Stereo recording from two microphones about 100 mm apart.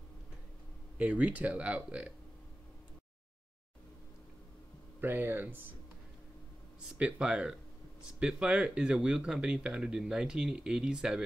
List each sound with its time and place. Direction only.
0.9 s speech: 15° right (ahead or behind)
5.0 s speech: 20° right (ahead or behind)
6.8 s speech: 10° right (ahead or behind)